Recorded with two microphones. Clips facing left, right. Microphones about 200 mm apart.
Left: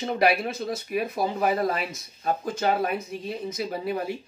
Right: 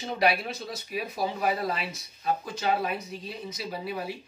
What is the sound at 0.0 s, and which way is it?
Speech, 55° left (ahead or behind).